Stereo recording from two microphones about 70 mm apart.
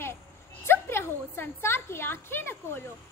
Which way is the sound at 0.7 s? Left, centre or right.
Left.